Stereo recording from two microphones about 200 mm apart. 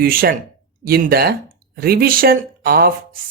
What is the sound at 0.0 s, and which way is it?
Speech, 45° right (ahead or behind).